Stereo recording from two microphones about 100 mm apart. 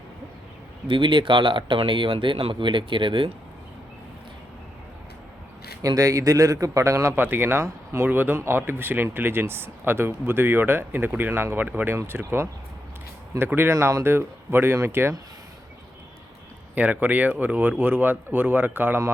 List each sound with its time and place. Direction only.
0.9 s speech: 55° right (ahead or behind)
5.8 s a man's voice: 35° right (ahead or behind)
13.3 s a man's voice: 35° right (ahead or behind)
16.7 s speech: 15° right (ahead or behind)